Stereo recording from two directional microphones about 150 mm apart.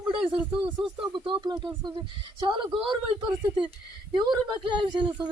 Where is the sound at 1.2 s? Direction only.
30° right (ahead or behind).